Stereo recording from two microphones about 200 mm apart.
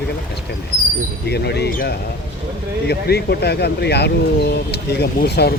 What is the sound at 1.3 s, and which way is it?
Speech, 55° left (ahead or behind).